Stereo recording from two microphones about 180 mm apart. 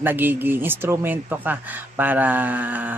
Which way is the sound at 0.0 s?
10° right (ahead or behind).